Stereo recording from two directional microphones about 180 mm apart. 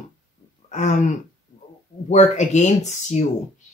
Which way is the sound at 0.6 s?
40° left (ahead or behind).